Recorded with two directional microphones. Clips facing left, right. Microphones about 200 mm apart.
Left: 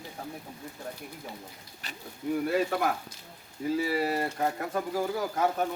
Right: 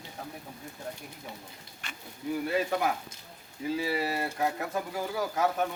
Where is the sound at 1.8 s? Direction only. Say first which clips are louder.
Left 2 dB; 35° left (ahead or behind).